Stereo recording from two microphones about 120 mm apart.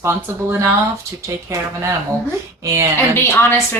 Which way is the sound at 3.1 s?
20° left (ahead or behind).